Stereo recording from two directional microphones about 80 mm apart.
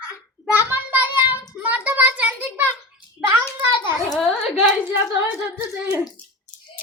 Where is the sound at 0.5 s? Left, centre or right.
Right.